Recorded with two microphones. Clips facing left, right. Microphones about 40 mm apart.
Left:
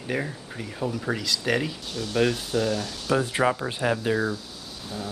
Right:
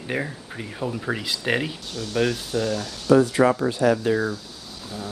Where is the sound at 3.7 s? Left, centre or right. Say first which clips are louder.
Right 6 dB; left.